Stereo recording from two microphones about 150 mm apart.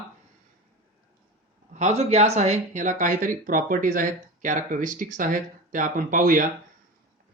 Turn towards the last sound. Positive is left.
turn(degrees=-65)  # may be behind; listen again after turning